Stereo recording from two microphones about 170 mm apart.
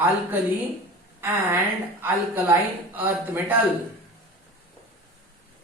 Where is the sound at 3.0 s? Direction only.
10° right (ahead or behind).